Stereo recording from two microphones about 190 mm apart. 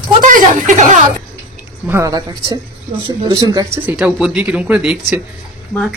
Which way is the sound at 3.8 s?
5° right (ahead or behind).